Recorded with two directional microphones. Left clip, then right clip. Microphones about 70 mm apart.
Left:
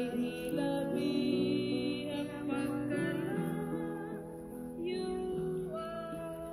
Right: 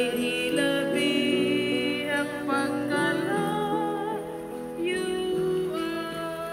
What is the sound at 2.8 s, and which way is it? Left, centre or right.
Music, centre.